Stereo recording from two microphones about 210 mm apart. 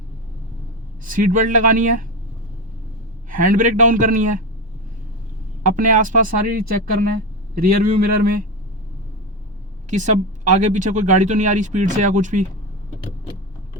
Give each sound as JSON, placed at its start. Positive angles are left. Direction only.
{"t": 1.0, "sound": "speech", "side_deg": -40}
{"t": 3.2, "sound": "speech", "side_deg": -40}
{"t": 5.6, "sound": "speech", "side_deg": -40}
{"t": 9.9, "sound": "speech", "side_deg": -35}